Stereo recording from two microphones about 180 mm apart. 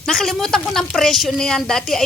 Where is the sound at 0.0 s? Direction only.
5° left (ahead or behind).